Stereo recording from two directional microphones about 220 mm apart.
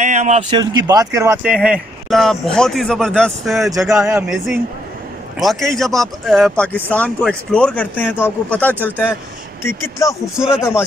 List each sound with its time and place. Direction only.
0.0 s a sound: 35° right (ahead or behind)
0.5 s speech: 20° right (ahead or behind); by 10.1 s 15° left (ahead or behind)
10.2 s speech: 5° right (ahead or behind)